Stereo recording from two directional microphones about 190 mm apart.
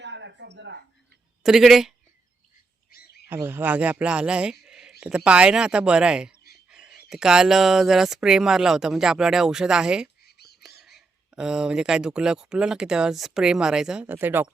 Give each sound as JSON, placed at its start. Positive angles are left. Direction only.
{"t": 0.0, "sound": "a sound", "side_deg": -65}
{"t": 1.5, "sound": "speech", "side_deg": 0}
{"t": 2.9, "sound": "frog", "side_deg": 55}
{"t": 3.2, "sound": "speech", "side_deg": -10}
{"t": 10.2, "sound": "whispering", "side_deg": 60}
{"t": 10.6, "sound": "speech", "side_deg": 0}